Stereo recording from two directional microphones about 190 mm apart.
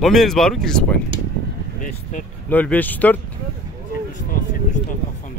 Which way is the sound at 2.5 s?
10° left (ahead or behind).